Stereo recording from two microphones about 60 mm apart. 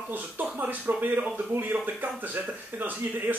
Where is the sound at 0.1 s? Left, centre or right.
Right.